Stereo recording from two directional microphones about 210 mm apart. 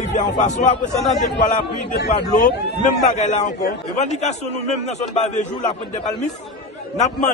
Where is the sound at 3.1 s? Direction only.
35° left (ahead or behind).